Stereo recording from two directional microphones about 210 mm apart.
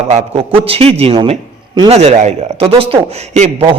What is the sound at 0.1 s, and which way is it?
A man's voice, 30° right (ahead or behind).